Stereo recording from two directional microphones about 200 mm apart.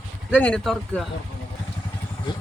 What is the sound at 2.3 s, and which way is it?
Speech, 25° left (ahead or behind).